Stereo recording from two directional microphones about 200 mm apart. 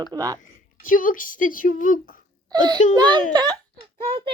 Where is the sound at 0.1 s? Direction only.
15° right (ahead or behind).